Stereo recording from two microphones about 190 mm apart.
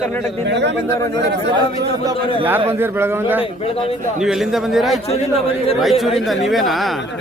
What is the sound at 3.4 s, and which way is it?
Speech, 30° left (ahead or behind).